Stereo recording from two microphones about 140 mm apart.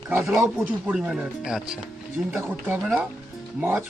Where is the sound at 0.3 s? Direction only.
15° right (ahead or behind).